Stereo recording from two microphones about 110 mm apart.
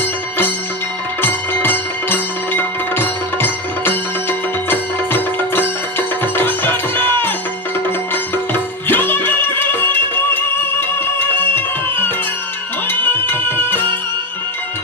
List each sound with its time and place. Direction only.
0.0 s music: 15° left (ahead or behind)